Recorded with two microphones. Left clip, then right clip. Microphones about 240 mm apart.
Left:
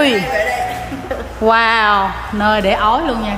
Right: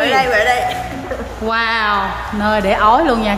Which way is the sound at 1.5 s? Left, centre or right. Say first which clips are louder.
Left 4 dB; centre.